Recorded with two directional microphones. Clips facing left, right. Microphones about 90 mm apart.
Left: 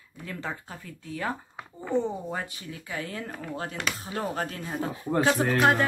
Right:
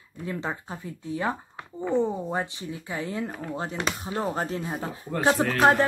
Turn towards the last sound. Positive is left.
turn(degrees=-30)  # may be behind; listen again after turning